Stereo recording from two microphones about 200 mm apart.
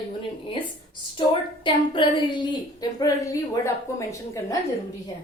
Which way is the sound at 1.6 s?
25° left (ahead or behind).